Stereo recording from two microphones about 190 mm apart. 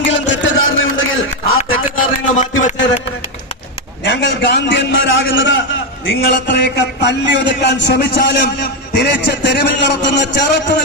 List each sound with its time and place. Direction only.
0.0 s music: 75° left (ahead or behind)
2.0 s a sound: 40° left (ahead or behind)
4.0 s a man's voice: 70° left (ahead or behind)
6.1 s a man's voice: 65° left (ahead or behind)